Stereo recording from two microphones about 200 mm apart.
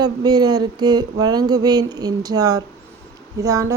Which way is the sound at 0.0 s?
20° right (ahead or behind).